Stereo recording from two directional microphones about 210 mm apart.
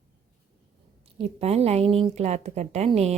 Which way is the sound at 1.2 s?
30° right (ahead or behind).